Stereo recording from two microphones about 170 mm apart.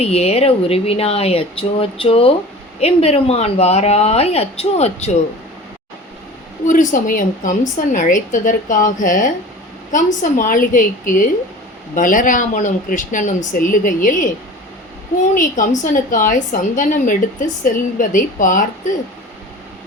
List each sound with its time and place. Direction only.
0.0 s speech: 40° left (ahead or behind)
6.7 s a woman's voice: 50° left (ahead or behind)
15.4 s a woman's voice: 50° left (ahead or behind)